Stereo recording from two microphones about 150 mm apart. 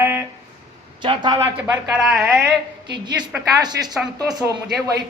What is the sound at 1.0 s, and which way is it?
Speech, 30° right (ahead or behind).